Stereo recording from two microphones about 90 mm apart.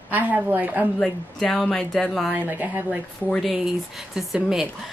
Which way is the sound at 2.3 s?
20° right (ahead or behind).